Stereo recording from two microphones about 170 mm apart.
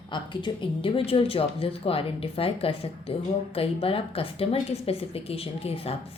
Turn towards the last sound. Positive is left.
turn(degrees=35)  # may be behind; listen again after turning